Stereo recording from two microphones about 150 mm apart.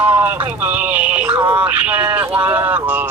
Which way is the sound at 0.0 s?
10° right (ahead or behind).